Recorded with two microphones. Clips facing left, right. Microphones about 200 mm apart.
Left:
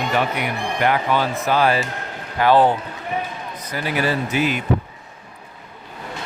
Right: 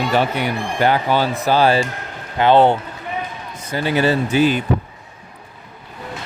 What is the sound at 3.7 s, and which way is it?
Speech, 25° right (ahead or behind).